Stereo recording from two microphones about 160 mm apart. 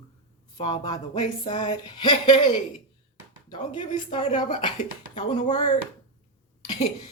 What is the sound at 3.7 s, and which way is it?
Speech, 35° left (ahead or behind).